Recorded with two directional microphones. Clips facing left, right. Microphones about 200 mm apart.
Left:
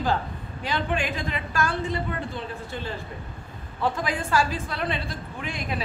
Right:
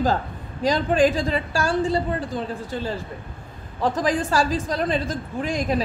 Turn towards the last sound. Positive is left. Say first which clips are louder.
# right 8 dB
turn(degrees=-40)  # may be behind; listen again after turning